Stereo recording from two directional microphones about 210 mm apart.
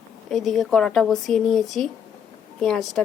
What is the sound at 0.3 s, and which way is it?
Speech, centre (ahead or behind).